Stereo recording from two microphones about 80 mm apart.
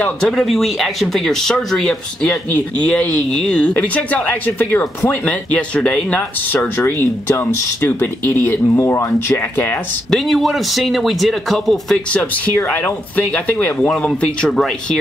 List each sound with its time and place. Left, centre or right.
0.2 s speech: centre; by 6.7 s left
6.8 s speech: left
10.1 s speech: centre
12.5 s speech: left
14.0 s speech: centre